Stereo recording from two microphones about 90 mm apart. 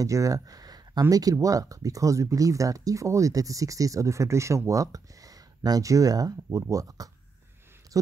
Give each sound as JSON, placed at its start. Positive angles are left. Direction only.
{"t": 0.0, "sound": "speech", "side_deg": -40}